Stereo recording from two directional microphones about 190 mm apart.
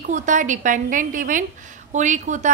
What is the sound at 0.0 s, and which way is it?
A woman's voice, 40° right (ahead or behind).